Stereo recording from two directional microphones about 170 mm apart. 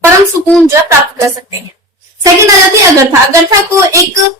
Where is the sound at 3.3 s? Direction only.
20° right (ahead or behind).